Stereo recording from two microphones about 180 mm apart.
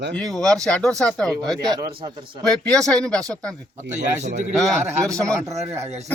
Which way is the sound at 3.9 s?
40° right (ahead or behind).